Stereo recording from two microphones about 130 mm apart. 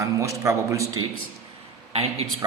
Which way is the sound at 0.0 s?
25° right (ahead or behind).